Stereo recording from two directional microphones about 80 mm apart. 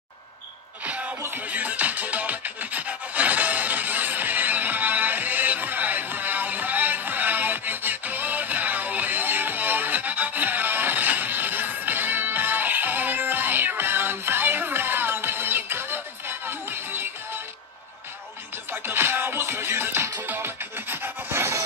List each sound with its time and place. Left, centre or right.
0.8 s music: centre
18.7 s music: right